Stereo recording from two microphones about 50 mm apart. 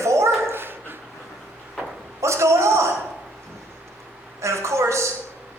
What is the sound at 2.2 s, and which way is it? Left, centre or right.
Speech, right.